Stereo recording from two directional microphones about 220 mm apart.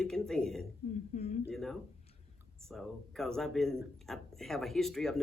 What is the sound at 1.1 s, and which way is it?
Speech, 30° left (ahead or behind).